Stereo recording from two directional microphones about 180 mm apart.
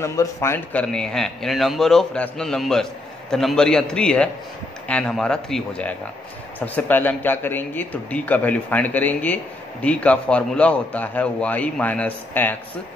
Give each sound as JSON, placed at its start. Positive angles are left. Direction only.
{"t": 0.0, "sound": "a man's voice", "side_deg": 15}
{"t": 0.8, "sound": "a man's voice", "side_deg": 5}